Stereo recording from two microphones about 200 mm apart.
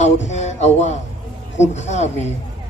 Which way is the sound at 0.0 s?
35° left (ahead or behind).